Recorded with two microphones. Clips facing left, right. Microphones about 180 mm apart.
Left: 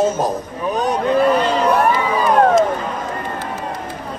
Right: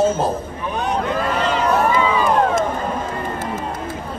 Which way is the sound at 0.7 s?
35° left (ahead or behind).